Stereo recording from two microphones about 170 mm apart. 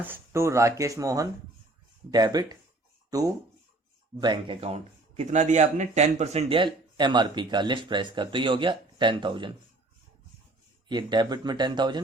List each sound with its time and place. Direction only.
0.0 s speech: 15° right (ahead or behind)
10.8 s speech: 25° right (ahead or behind)